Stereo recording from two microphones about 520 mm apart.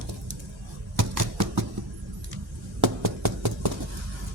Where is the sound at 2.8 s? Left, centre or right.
Right.